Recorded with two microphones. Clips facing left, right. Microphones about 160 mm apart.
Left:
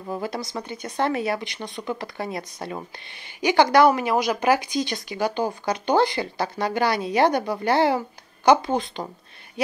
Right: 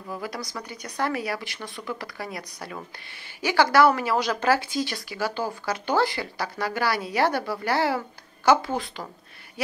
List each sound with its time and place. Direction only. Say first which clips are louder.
0.1 s a woman's voice: left 4 dB; 25° left (ahead or behind)